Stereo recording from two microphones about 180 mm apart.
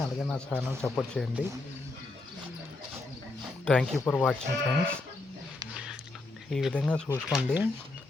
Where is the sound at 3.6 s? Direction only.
5° left (ahead or behind).